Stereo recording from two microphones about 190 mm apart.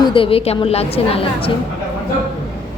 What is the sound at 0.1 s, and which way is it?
A woman's voice, 30° left (ahead or behind).